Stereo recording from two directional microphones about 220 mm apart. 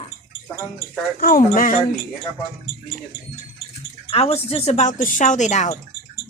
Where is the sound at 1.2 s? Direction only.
40° left (ahead or behind).